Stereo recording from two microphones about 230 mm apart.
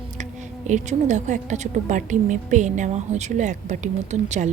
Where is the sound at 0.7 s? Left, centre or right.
Right.